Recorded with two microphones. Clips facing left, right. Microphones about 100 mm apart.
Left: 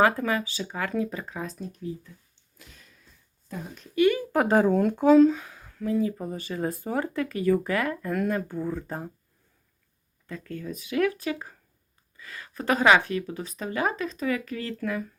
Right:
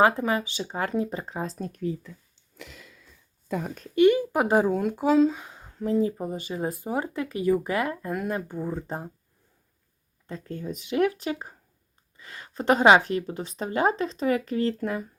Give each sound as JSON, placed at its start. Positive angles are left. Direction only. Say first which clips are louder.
{"t": 0.0, "sound": "speech", "louder": "right 1 dB", "side_deg": -25}
{"t": 1.5, "sound": "speech", "louder": "right 4 dB", "side_deg": -55}
{"t": 3.9, "sound": "speech", "louder": "right 2 dB", "side_deg": -25}
{"t": 5.4, "sound": "speech", "louder": "right 2 dB", "side_deg": -25}
{"t": 6.1, "sound": "speech", "louder": "right 1 dB", "side_deg": -20}
{"t": 10.2, "sound": "speech", "louder": "right 1 dB", "side_deg": -30}